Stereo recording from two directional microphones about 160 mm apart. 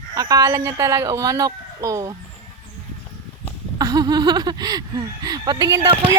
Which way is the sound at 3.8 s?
25° right (ahead or behind).